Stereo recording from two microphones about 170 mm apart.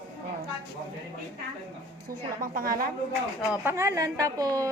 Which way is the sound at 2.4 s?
55° right (ahead or behind).